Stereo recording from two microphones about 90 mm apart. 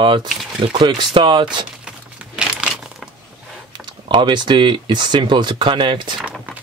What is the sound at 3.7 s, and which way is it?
Speech, 60° right (ahead or behind).